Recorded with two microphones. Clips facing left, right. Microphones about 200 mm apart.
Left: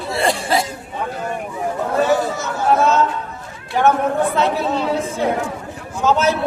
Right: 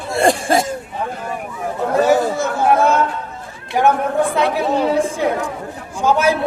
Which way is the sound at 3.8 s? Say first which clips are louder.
Right 1 dB; 15° right (ahead or behind).